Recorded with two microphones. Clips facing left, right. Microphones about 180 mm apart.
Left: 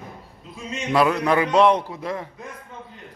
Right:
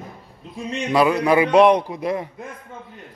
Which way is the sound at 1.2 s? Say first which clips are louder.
Right 3 dB; 15° right (ahead or behind).